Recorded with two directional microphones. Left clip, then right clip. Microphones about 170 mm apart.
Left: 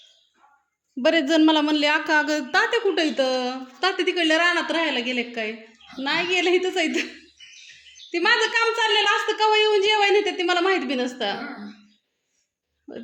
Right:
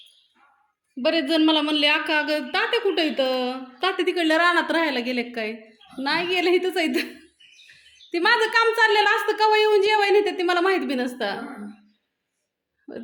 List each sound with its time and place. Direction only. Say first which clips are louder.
0.9 s a man's voice: left 2 dB; 25° left (ahead or behind); by 7.0 s 5° right (ahead or behind)
8.1 s a woman's voice: right 1 dB; 5° right (ahead or behind)